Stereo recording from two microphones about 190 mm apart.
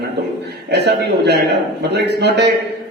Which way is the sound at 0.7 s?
65° right (ahead or behind).